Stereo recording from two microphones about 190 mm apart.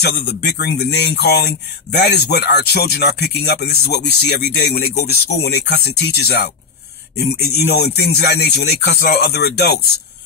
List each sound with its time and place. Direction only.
0.0 s speech: 60° left (ahead or behind)